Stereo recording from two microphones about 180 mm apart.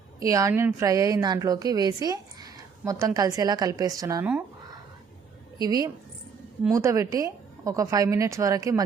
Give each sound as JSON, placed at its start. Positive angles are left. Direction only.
{"t": 0.2, "sound": "a woman's voice", "side_deg": -20}
{"t": 5.5, "sound": "a woman's voice", "side_deg": -20}